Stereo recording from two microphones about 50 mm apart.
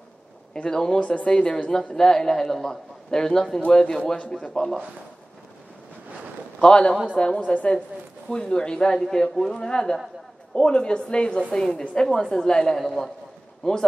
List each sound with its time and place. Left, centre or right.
0.5 s a man's voice: centre
1.0 s a woman's voice: left; by 4.7 s centre
6.6 s a man's voice: centre